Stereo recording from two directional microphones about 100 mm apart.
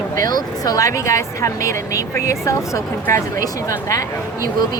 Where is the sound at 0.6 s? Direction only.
35° left (ahead or behind).